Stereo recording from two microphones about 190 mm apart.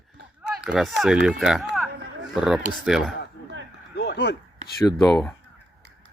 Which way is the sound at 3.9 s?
60° left (ahead or behind).